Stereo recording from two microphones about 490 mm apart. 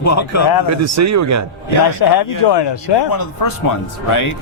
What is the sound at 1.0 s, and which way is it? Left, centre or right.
Speech, right.